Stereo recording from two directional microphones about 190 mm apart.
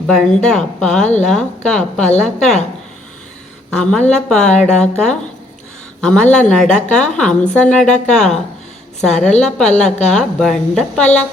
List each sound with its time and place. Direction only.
0.1 s a woman's voice: centre (ahead or behind)
1.0 s speech: 35° left (ahead or behind)
1.3 s a woman's voice: 5° left (ahead or behind)
3.8 s a woman's voice: 5° left (ahead or behind)